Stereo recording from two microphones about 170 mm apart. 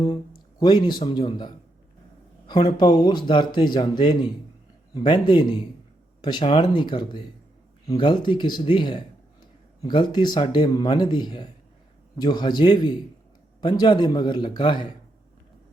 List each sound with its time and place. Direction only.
0.6 s speech: 25° left (ahead or behind)
2.7 s speech: 25° left (ahead or behind)